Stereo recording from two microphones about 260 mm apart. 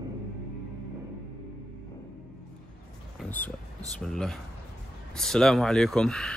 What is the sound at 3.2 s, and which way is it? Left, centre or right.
Speech, centre.